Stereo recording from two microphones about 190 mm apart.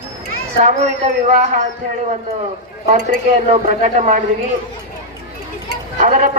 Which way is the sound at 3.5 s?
35° right (ahead or behind).